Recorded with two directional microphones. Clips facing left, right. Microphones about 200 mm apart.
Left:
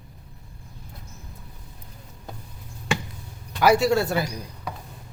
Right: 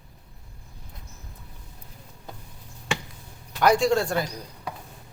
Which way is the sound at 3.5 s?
5° left (ahead or behind).